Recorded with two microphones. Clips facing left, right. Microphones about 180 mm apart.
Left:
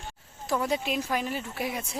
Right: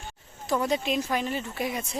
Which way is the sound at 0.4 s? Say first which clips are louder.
Right 2 dB; 5° left (ahead or behind).